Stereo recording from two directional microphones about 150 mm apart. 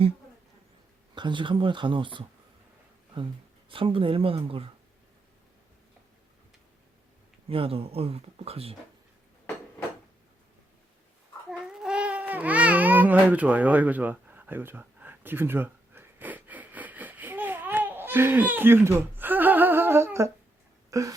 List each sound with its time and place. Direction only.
1.1 s speech: 30° right (ahead or behind)
3.7 s speech: 35° right (ahead or behind)
7.4 s speech: 40° right (ahead or behind)
11.4 s babbling: centre (ahead or behind); by 20.3 s 20° right (ahead or behind)
20.9 s speech: 20° right (ahead or behind)